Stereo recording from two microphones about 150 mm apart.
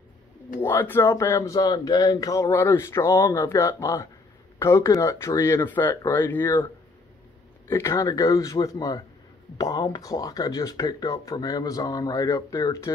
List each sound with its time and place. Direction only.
0.6 s speech: 15° left (ahead or behind)
7.6 s speech: 20° left (ahead or behind)